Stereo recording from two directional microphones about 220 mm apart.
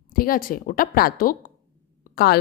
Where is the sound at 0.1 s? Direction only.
40° left (ahead or behind).